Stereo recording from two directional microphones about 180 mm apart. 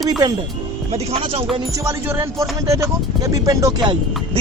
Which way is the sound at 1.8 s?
10° right (ahead or behind).